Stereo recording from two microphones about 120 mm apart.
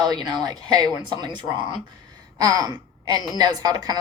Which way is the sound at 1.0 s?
40° right (ahead or behind).